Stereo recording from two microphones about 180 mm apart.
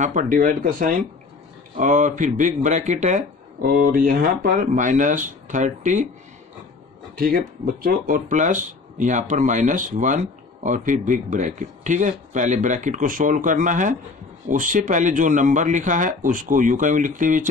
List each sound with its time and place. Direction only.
0.0 s speech: 45° right (ahead or behind)
7.2 s speech: 50° right (ahead or behind)